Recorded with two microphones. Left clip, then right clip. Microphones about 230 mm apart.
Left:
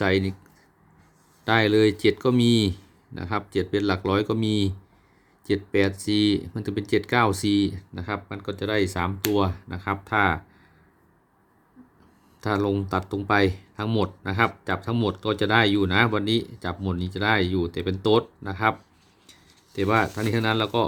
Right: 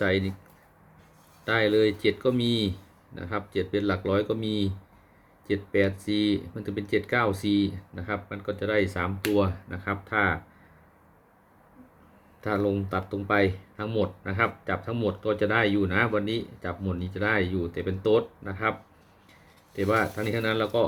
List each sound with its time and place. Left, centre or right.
0.0 s speech: left
1.5 s speech: left
12.4 s speech: left